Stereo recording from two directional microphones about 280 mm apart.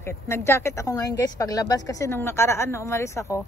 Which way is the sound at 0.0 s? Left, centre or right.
Centre.